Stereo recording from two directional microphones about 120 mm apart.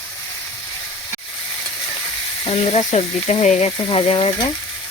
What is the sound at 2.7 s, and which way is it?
Speech, 65° left (ahead or behind).